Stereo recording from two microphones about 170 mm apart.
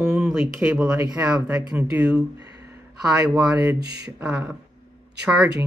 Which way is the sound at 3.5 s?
15° right (ahead or behind).